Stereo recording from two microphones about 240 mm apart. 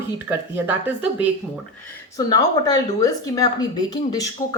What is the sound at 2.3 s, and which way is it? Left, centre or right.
Speech, centre.